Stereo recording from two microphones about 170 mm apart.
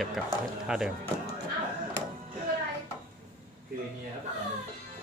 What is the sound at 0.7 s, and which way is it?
Speech, 5° right (ahead or behind).